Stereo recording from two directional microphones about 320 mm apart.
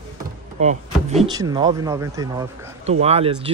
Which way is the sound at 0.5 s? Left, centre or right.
Right.